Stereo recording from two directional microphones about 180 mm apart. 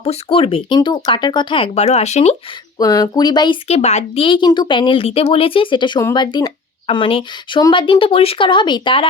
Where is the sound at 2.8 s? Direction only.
20° left (ahead or behind).